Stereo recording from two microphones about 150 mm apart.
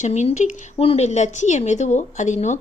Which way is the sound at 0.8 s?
45° left (ahead or behind).